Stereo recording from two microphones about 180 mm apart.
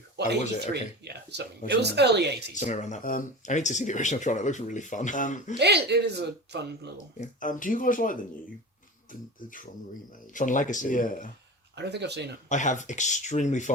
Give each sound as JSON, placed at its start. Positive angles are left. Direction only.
{"t": 0.7, "sound": "speech", "side_deg": -70}
{"t": 2.6, "sound": "speech", "side_deg": 40}
{"t": 5.5, "sound": "speech", "side_deg": -70}
{"t": 7.2, "sound": "speech", "side_deg": 45}
{"t": 10.3, "sound": "speech", "side_deg": 45}
{"t": 11.8, "sound": "speech", "side_deg": -70}
{"t": 12.5, "sound": "speech", "side_deg": 45}